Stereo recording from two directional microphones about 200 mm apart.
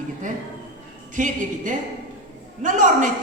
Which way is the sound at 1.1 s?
40° right (ahead or behind).